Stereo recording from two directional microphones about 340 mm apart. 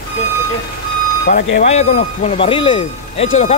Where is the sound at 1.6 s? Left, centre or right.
Centre.